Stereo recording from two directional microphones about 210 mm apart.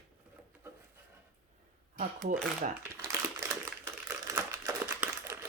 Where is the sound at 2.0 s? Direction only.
40° right (ahead or behind).